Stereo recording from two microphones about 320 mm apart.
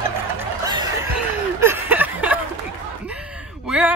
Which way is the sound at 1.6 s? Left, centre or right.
Centre.